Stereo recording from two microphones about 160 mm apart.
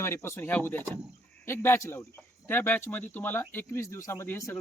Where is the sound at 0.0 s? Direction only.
15° left (ahead or behind).